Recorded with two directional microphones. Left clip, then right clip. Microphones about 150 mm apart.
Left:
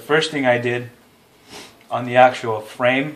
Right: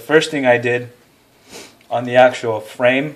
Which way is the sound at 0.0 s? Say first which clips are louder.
Right 3 dB; 50° right (ahead or behind).